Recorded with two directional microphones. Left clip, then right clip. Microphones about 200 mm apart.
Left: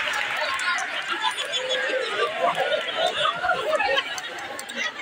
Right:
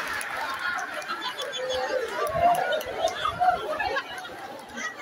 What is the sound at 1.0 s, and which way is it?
Chatter, 60° right (ahead or behind).